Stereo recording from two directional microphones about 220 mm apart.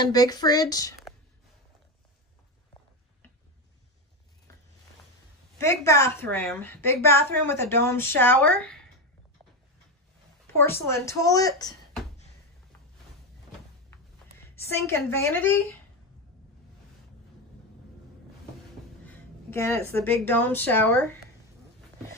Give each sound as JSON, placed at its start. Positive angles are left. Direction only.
{"t": 0.0, "sound": "a woman's voice", "side_deg": 15}
{"t": 5.6, "sound": "a woman's voice", "side_deg": 15}
{"t": 10.4, "sound": "a woman's voice", "side_deg": 10}
{"t": 14.6, "sound": "a woman's voice", "side_deg": 10}
{"t": 19.0, "sound": "a woman's voice", "side_deg": 10}